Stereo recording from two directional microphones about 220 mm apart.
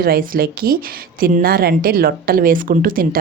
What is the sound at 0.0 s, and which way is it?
Speech, 40° right (ahead or behind).